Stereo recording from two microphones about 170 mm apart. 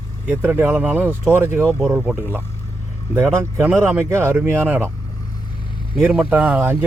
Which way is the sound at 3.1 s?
15° right (ahead or behind).